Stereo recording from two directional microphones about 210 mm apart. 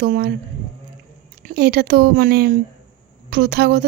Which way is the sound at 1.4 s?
50° right (ahead or behind).